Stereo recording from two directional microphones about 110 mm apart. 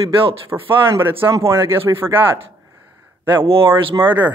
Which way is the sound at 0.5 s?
20° right (ahead or behind).